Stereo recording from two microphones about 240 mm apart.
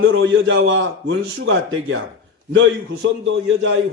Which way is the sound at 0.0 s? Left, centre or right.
Right.